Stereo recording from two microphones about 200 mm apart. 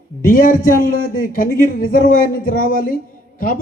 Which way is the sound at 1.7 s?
45° left (ahead or behind).